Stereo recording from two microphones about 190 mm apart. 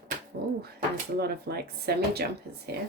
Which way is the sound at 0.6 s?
55° right (ahead or behind).